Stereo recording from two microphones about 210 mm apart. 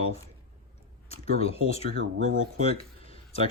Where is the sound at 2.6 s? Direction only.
30° left (ahead or behind).